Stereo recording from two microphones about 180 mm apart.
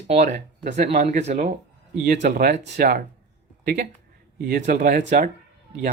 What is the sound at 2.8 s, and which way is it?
Speech, 60° right (ahead or behind).